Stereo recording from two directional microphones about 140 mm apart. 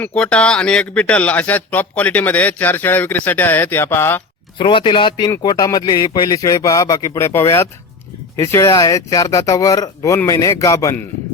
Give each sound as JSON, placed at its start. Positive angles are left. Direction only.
{"t": 0.0, "sound": "speech", "side_deg": 10}
{"t": 4.5, "sound": "speech", "side_deg": 35}